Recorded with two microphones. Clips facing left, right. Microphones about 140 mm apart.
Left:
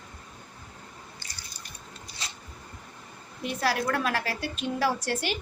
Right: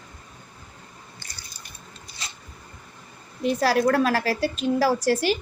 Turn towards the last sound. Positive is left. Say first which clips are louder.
# right 7 dB
turn(degrees=-35)  # may be behind; listen again after turning